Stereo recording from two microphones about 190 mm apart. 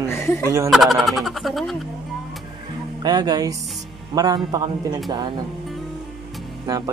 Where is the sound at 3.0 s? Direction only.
20° right (ahead or behind).